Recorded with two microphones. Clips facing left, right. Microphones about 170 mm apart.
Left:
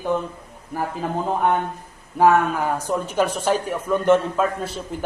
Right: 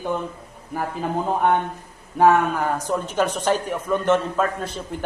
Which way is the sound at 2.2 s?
5° left (ahead or behind).